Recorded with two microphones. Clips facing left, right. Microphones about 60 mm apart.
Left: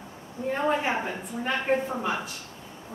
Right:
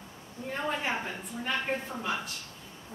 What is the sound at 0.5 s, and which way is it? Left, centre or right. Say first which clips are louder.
A woman's voice: left 6 dB; centre.